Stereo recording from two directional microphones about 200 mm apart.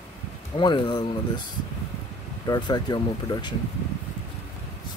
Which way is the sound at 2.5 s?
20° left (ahead or behind).